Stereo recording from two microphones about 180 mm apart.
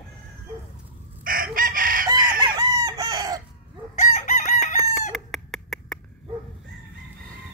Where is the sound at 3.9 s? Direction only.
40° left (ahead or behind).